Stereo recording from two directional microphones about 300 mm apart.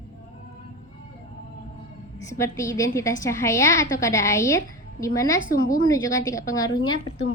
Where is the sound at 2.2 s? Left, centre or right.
Centre.